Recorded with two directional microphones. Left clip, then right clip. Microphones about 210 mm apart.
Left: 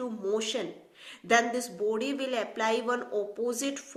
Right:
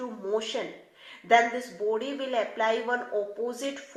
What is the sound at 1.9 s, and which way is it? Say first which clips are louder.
Speech: right 4 dB; 40° left (ahead or behind).